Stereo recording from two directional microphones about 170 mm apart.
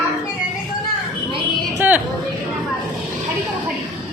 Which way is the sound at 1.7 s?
10° right (ahead or behind).